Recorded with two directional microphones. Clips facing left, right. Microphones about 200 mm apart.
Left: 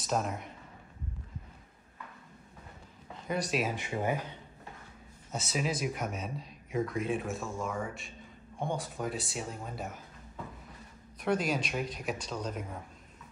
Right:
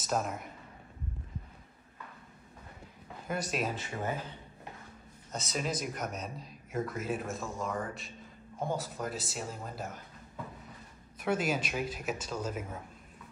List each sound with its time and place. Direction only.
0.0 s speech: centre (ahead or behind)
3.3 s speech: centre (ahead or behind)
3.7 s speech: 15° left (ahead or behind)
5.3 s speech: 5° left (ahead or behind)
11.1 s speech: 5° right (ahead or behind)